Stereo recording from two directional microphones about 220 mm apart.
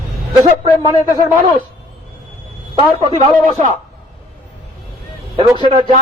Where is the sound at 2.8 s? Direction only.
25° right (ahead or behind).